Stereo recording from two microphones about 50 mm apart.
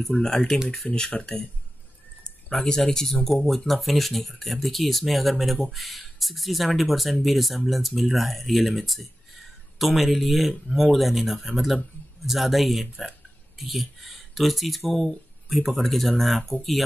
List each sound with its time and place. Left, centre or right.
0.0 s speech: centre
1.1 s speech: left
2.5 s speech: centre